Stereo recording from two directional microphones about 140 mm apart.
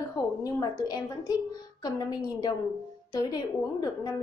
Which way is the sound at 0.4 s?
25° left (ahead or behind).